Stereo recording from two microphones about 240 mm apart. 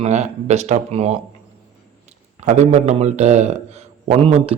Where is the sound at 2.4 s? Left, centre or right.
Right.